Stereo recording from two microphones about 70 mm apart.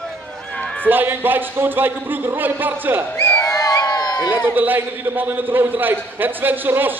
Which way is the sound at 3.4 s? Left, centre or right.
Left.